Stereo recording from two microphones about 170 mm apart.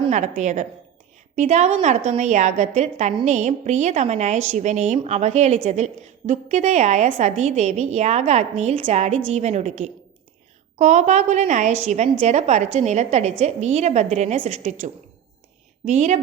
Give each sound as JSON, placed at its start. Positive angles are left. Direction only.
{"t": 0.1, "sound": "a woman's voice", "side_deg": -45}
{"t": 15.9, "sound": "a woman's voice", "side_deg": -40}